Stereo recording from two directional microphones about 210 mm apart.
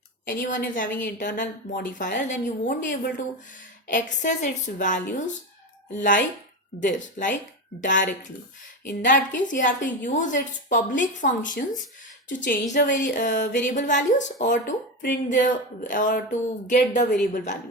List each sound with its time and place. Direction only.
0.3 s a woman's voice: 40° left (ahead or behind)